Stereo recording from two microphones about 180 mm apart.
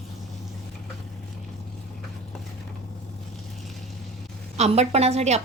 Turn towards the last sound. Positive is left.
turn(degrees=-35)  # may be behind; listen again after turning